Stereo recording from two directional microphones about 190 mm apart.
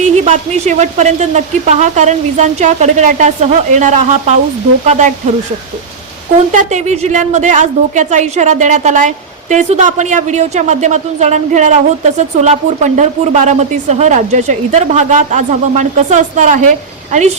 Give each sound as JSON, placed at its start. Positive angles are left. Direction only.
{"t": 0.0, "sound": "a woman's voice", "side_deg": -40}
{"t": 6.5, "sound": "a woman's voice", "side_deg": -40}